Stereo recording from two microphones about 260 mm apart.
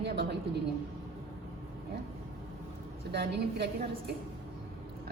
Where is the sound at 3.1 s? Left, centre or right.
Right.